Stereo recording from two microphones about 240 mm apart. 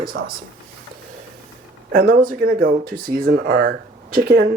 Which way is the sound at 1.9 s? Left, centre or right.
Right.